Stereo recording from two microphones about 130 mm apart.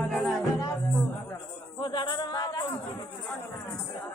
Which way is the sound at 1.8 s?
35° left (ahead or behind).